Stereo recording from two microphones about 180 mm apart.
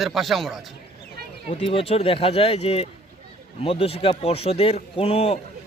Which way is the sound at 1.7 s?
35° left (ahead or behind).